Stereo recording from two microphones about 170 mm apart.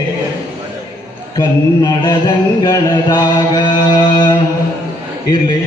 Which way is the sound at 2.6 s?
20° left (ahead or behind).